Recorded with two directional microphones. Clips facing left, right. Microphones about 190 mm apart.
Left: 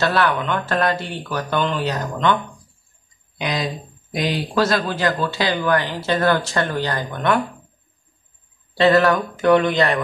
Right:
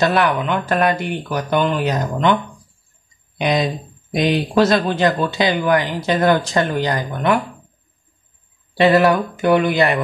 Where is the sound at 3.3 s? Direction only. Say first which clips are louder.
Right 6 dB; 20° right (ahead or behind).